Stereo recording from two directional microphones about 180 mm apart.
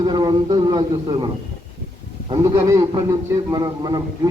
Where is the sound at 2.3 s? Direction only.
15° right (ahead or behind).